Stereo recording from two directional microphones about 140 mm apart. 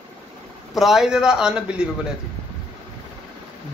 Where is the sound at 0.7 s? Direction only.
5° right (ahead or behind).